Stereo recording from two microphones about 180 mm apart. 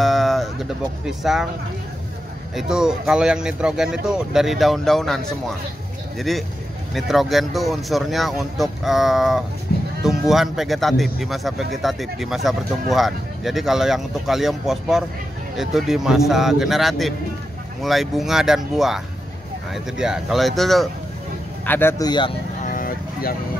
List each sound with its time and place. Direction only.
0.0 s music: centre (ahead or behind)
2.5 s a man's voice: 5° right (ahead or behind)
9.7 s sheep: 55° left (ahead or behind)
10.0 s a man's voice: centre (ahead or behind)
21.6 s speech: 10° left (ahead or behind)
22.6 s vehicle: 50° left (ahead or behind)